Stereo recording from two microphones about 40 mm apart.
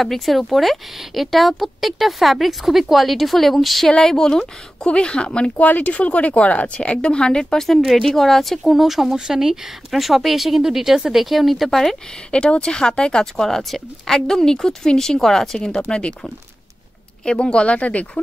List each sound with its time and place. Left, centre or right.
0.0 s speech: centre
3.9 s speech: centre
5.6 s speech: left; by 7.6 s centre
7.8 s speech: centre
12.3 s speech: left
13.4 s speech: centre
15.9 s speech: left
17.2 s speech: left